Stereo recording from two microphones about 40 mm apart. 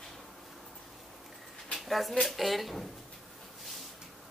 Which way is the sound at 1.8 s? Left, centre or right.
Centre.